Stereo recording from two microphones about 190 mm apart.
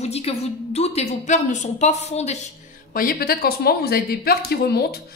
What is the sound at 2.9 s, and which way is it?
Speech, 50° left (ahead or behind).